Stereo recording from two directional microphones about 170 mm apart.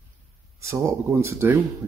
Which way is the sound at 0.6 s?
15° right (ahead or behind).